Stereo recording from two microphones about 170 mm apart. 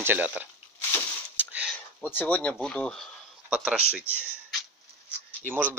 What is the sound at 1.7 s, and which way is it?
Speech, 10° left (ahead or behind).